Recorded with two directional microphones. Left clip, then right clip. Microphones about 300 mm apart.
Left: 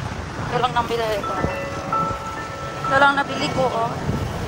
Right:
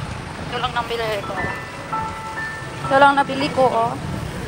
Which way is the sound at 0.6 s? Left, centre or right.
Centre.